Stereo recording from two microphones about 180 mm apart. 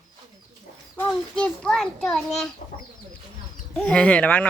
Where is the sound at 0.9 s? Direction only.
5° left (ahead or behind).